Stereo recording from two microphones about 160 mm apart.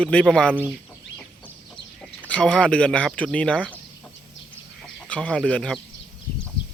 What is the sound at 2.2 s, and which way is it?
Speech, 5° left (ahead or behind).